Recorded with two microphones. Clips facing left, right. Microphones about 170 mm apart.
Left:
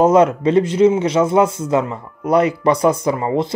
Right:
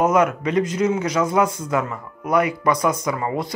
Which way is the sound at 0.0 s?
30° left (ahead or behind).